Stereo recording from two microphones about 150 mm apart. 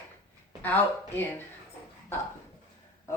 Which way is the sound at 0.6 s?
10° left (ahead or behind).